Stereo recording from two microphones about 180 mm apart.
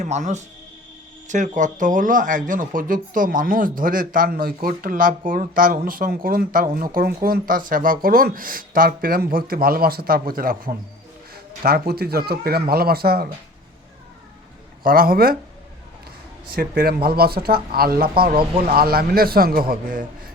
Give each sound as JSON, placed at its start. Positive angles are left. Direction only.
{"t": 0.0, "sound": "speech", "side_deg": -40}
{"t": 14.8, "sound": "speech", "side_deg": -55}
{"t": 16.5, "sound": "speech", "side_deg": -55}